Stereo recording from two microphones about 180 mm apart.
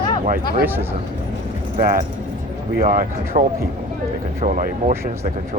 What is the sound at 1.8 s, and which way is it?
Speech, 50° right (ahead or behind).